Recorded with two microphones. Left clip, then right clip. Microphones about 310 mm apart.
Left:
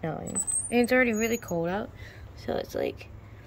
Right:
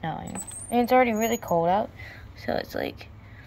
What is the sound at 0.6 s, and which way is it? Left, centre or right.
Speech, right.